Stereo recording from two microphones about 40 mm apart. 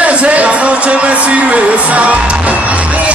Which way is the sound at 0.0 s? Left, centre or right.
Right.